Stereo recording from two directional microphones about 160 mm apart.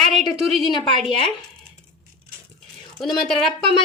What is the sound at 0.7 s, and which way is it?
Speech, 30° left (ahead or behind).